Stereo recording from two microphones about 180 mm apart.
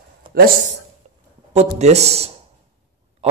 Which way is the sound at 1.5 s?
35° right (ahead or behind).